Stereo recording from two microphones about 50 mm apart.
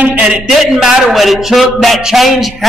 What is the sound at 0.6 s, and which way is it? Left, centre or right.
A man's voice, centre.